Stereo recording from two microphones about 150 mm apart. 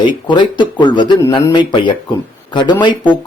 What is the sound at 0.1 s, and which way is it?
A man's voice, 30° left (ahead or behind).